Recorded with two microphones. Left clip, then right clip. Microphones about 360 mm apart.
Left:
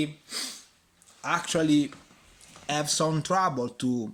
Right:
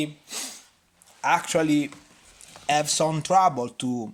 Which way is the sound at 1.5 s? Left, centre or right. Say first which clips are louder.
Right 2 dB; right.